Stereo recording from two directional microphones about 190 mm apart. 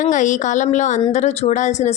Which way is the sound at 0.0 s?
40° left (ahead or behind).